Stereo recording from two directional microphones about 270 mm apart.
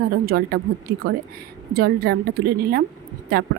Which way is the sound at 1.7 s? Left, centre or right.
Right.